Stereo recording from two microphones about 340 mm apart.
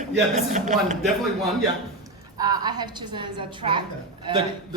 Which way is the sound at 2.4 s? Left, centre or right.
Centre.